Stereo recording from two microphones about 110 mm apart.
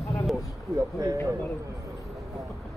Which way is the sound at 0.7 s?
30° right (ahead or behind).